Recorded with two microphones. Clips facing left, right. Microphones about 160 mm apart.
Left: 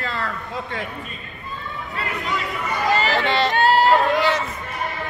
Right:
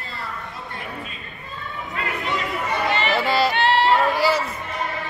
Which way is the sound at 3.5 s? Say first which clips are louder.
Left 2 dB; 40° left (ahead or behind).